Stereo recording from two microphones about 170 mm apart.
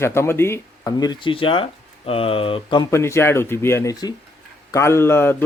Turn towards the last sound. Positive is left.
turn(degrees=15)  # may be behind; listen again after turning